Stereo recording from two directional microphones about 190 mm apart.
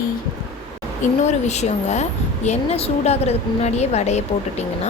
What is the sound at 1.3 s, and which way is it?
A woman's voice, 35° left (ahead or behind).